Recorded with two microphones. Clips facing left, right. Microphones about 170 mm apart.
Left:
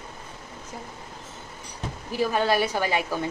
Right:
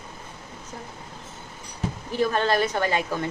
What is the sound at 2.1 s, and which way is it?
A woman's voice, 10° left (ahead or behind).